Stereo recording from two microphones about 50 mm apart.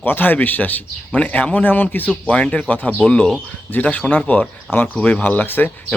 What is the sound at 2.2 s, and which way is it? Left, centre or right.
Speech, left.